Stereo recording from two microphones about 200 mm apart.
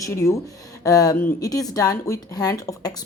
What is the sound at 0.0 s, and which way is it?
Speech, 15° left (ahead or behind).